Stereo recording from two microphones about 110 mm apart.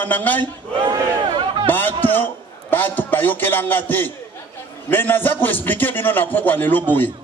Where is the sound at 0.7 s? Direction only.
40° right (ahead or behind).